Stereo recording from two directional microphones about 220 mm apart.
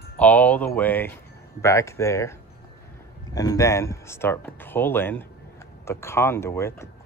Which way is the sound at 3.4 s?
15° left (ahead or behind).